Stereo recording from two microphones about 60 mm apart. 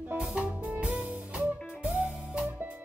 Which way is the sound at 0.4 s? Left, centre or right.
Right.